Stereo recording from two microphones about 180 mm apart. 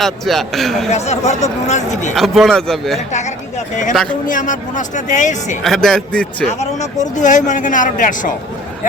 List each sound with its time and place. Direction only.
0.0 s a man's voice: centre (ahead or behind)
0.9 s speech: 40° left (ahead or behind)
2.1 s a man's voice: centre (ahead or behind)
3.1 s a man's voice: 40° left (ahead or behind)
5.6 s a man's voice: centre (ahead or behind)
6.6 s a man's voice: 40° left (ahead or behind)